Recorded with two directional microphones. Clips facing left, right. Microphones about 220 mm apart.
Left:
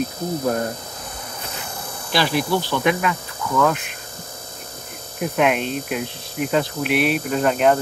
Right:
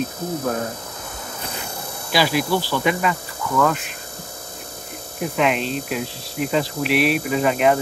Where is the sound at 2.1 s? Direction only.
10° right (ahead or behind).